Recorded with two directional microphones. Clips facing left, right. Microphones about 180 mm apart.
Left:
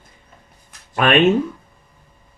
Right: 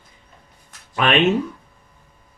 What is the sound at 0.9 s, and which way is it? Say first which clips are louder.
Speech: left 3 dB; 50° left (ahead or behind).